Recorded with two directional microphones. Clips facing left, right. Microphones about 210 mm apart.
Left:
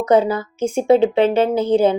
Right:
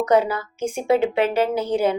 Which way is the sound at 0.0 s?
30° left (ahead or behind).